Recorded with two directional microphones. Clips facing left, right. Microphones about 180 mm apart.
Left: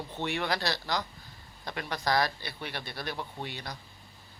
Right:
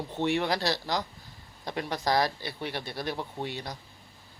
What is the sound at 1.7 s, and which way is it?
Speech, 20° right (ahead or behind).